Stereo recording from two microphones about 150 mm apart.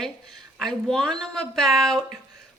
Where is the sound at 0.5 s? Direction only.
5° left (ahead or behind).